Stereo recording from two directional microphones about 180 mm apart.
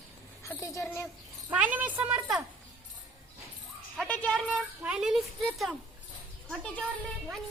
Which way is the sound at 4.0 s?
5° left (ahead or behind).